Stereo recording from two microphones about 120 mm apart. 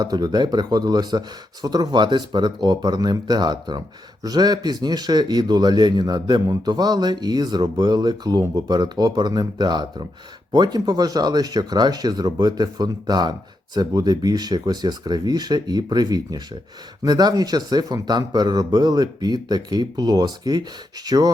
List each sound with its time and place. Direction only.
0.0 s a man's voice: 35° right (ahead or behind)